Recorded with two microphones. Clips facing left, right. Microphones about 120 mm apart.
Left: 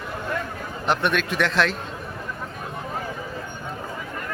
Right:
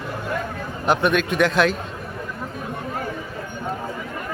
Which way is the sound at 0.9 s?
Centre (ahead or behind).